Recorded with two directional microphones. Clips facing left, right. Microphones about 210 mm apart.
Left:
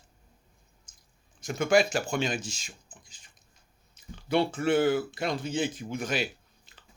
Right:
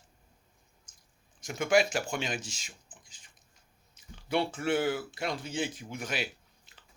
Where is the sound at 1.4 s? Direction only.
15° right (ahead or behind).